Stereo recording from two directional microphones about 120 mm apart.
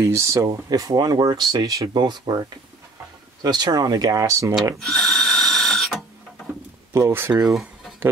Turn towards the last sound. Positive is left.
turn(degrees=0)  # may be behind; listen again after turning